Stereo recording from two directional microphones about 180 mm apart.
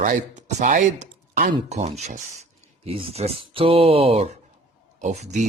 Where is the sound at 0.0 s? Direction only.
45° right (ahead or behind).